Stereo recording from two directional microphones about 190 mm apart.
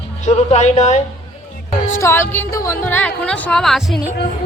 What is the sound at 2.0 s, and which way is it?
A woman's voice, 15° left (ahead or behind).